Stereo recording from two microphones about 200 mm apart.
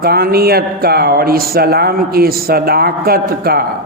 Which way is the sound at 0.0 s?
50° right (ahead or behind).